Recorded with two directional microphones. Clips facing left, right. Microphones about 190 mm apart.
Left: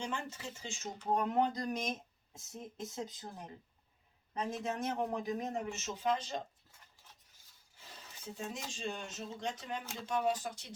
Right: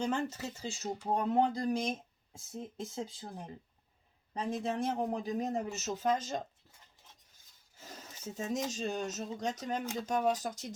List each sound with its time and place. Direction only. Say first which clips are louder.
0.0 s speech: right 7 dB; 40° right (ahead or behind)
4.5 s speech: right 4 dB; 35° right (ahead or behind)
7.8 s speech: right 5 dB; 45° right (ahead or behind)